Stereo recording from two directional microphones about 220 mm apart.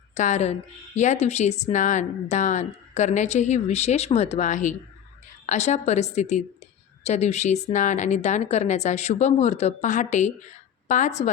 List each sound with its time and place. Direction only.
0.1 s a woman's voice: 35° left (ahead or behind)